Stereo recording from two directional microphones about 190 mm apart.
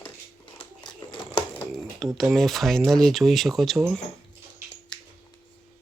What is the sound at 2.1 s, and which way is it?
Speech, centre (ahead or behind).